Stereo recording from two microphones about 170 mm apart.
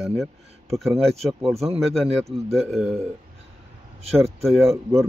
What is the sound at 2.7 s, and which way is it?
Speech, 5° right (ahead or behind).